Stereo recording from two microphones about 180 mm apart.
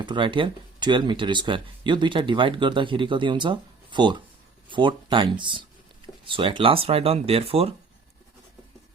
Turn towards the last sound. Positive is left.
turn(degrees=-35)  # may be behind; listen again after turning